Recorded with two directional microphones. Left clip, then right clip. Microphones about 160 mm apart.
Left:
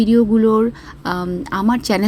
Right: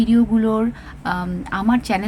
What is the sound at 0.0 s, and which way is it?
Speech, 20° left (ahead or behind).